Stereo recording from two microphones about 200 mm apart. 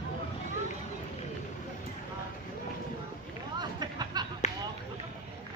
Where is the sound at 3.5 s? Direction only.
20° right (ahead or behind).